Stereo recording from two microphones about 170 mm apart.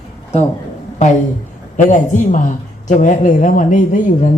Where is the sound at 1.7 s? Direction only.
45° left (ahead or behind).